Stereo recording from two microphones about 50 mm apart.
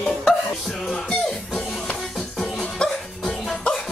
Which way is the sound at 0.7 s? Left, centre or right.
Centre.